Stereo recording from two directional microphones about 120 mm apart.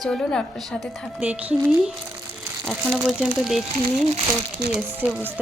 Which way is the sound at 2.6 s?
Centre (ahead or behind).